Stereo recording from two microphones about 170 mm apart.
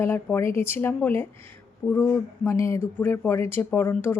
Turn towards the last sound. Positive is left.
turn(degrees=10)  # may be behind; listen again after turning